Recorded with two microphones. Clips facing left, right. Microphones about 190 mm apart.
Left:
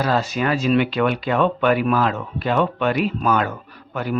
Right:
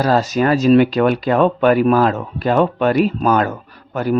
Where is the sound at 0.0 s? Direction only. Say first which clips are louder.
Right 5 dB; 40° right (ahead or behind).